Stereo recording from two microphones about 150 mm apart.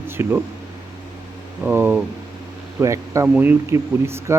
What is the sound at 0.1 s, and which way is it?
Speech, 15° right (ahead or behind).